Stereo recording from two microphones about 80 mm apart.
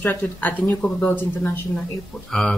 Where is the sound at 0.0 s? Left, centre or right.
Left.